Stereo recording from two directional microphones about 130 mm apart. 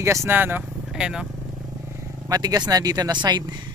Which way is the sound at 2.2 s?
30° right (ahead or behind).